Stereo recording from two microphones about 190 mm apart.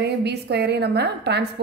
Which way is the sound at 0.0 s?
60° right (ahead or behind).